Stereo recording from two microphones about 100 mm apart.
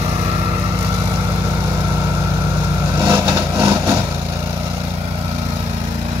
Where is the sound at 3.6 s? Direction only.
25° right (ahead or behind).